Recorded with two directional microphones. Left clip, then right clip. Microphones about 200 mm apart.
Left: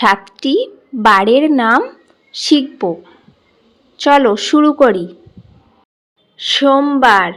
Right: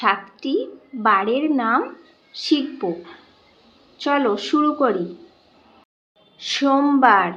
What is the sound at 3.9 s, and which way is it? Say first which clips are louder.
Speech: left 10 dB; 40° left (ahead or behind).